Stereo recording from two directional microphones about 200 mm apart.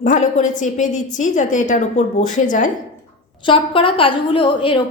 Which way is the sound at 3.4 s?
25° left (ahead or behind).